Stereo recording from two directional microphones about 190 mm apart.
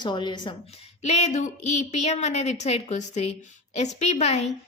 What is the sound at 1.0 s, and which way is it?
A woman's voice, 35° left (ahead or behind).